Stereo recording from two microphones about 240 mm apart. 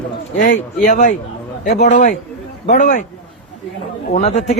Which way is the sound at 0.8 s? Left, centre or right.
Left.